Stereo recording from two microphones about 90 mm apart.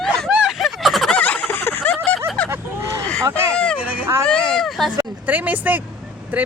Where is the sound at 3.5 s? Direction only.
10° left (ahead or behind).